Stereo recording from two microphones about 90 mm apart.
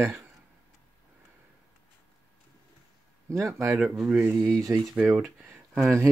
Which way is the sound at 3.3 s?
35° right (ahead or behind).